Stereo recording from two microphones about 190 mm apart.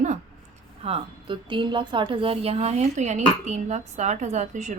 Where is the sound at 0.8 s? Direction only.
30° right (ahead or behind).